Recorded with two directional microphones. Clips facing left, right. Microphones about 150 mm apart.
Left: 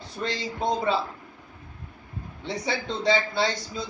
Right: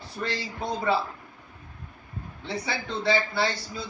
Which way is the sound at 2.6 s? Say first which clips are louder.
Left 3 dB; 20° left (ahead or behind).